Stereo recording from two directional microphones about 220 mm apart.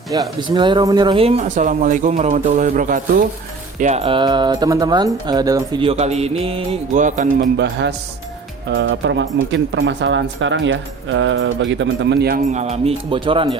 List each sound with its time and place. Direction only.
0.1 s speech: 20° right (ahead or behind); by 3.2 s 40° right (ahead or behind)
3.8 s music: 30° right (ahead or behind)
7.6 s speech: 50° right (ahead or behind); by 13.6 s 25° right (ahead or behind)